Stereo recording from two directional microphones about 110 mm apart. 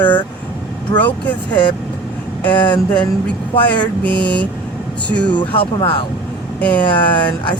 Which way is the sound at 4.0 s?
15° left (ahead or behind).